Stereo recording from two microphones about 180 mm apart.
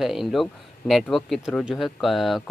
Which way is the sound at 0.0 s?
Centre (ahead or behind).